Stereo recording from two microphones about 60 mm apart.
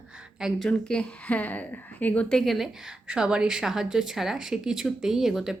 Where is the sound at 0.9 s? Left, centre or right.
Centre.